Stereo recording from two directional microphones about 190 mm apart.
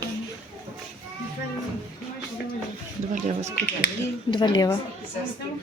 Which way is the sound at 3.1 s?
35° right (ahead or behind).